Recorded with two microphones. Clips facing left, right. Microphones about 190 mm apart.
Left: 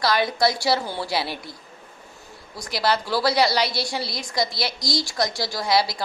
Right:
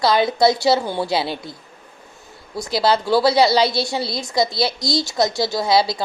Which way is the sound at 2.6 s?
25° right (ahead or behind).